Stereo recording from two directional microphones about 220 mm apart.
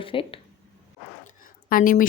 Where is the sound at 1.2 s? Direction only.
40° left (ahead or behind).